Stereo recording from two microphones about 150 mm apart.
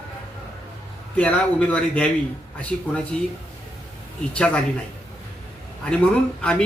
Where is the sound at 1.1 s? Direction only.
10° left (ahead or behind).